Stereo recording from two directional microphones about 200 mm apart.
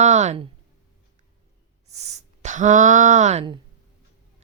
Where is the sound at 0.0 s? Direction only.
35° right (ahead or behind).